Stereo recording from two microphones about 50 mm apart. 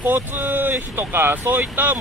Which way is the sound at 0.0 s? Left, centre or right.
Right.